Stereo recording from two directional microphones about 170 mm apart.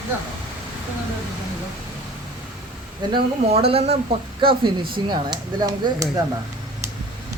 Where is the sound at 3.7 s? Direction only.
35° right (ahead or behind).